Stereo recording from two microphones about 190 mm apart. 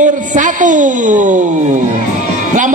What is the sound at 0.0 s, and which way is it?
A woman's voice, 40° right (ahead or behind).